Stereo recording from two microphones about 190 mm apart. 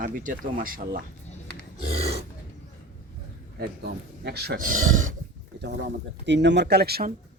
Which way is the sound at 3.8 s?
60° right (ahead or behind).